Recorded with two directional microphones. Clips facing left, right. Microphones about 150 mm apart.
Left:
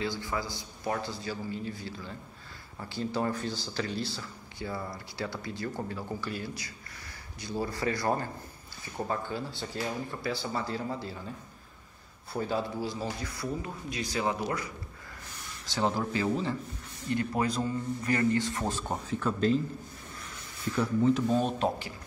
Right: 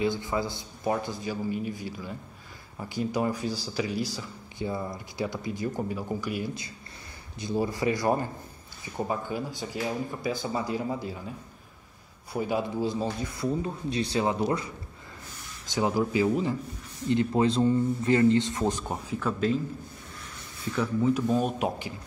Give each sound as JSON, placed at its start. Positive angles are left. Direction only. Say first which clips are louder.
{"t": 0.0, "sound": "a man's voice", "louder": "right 5 dB", "side_deg": -20}
{"t": 15.6, "sound": "a man's voice", "louder": "right 3 dB", "side_deg": -15}
{"t": 21.0, "sound": "speech", "louder": "right 1 dB", "side_deg": -10}